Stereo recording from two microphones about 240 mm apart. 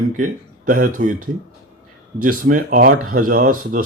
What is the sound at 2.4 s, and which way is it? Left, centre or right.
Speech, right.